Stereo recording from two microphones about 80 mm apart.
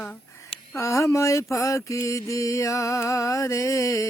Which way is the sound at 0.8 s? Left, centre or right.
Left.